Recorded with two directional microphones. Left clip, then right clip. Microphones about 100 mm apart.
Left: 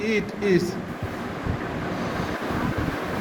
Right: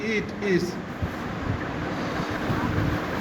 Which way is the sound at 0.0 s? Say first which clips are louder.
Left 3 dB; 40° left (ahead or behind).